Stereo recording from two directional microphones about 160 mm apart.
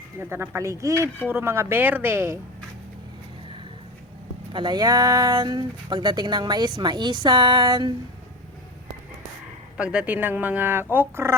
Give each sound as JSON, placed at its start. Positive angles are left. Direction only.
{"t": 0.2, "sound": "speech", "side_deg": -15}
{"t": 4.5, "sound": "speech", "side_deg": -25}
{"t": 9.7, "sound": "speech", "side_deg": -5}